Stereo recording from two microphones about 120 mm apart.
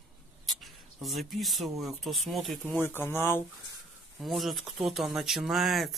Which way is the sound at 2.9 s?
20° left (ahead or behind).